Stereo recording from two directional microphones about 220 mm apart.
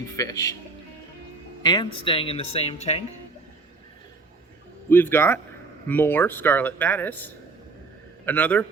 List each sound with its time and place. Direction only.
0.2 s speech: 15° left (ahead or behind)
1.6 s speech: 20° left (ahead or behind)
4.9 s speech: 10° left (ahead or behind)